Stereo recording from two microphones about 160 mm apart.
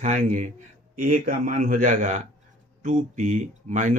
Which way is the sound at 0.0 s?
50° right (ahead or behind).